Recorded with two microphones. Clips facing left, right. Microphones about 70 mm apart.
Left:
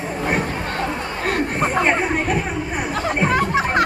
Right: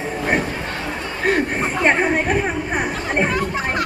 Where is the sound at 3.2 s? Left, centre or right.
Left.